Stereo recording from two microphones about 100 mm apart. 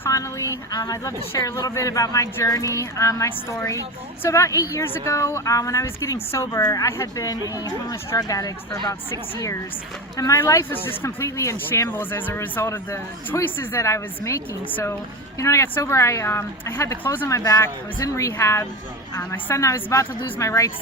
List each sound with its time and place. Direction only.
0.0 s a woman's voice: 30° left (ahead or behind)
10.2 s speech: 35° left (ahead or behind)
14.7 s speech: 20° left (ahead or behind)
15.4 s speech: 30° left (ahead or behind)
17.2 s a woman's voice: 35° left (ahead or behind)